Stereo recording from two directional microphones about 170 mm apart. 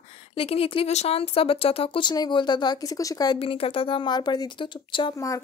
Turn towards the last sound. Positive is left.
turn(degrees=20)  # may be behind; listen again after turning